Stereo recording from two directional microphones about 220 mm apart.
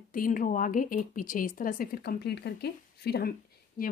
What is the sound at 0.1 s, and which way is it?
Speech, 40° left (ahead or behind).